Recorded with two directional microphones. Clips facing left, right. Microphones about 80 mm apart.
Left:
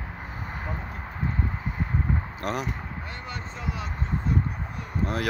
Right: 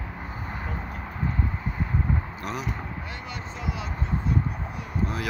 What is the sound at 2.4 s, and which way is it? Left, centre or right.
Speech, left.